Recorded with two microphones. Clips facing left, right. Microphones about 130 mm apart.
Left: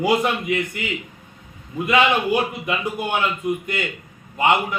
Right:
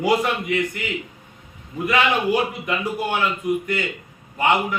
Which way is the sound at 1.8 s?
20° left (ahead or behind).